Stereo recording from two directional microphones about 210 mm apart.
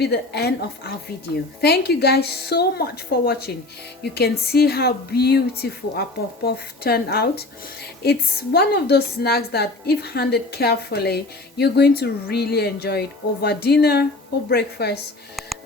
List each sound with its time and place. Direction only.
0.0 s a woman's voice: 50° left (ahead or behind)